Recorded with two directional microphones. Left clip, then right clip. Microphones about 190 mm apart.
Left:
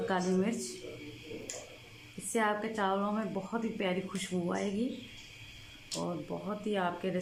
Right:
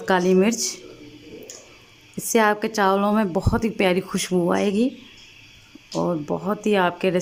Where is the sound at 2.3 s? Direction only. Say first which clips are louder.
Right 12 dB; 65° right (ahead or behind).